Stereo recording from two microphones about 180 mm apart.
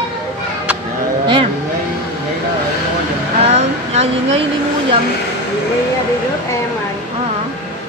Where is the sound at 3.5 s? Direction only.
35° right (ahead or behind).